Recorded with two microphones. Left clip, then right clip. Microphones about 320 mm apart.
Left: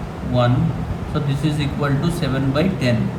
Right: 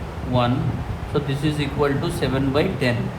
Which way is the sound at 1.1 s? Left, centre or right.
Right.